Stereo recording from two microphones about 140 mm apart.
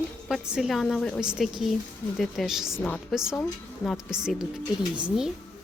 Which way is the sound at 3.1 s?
5° right (ahead or behind).